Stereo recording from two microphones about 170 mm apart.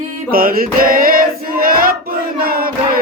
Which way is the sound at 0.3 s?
60° right (ahead or behind).